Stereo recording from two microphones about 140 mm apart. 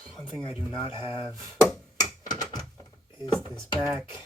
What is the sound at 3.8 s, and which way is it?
Speech, 15° right (ahead or behind).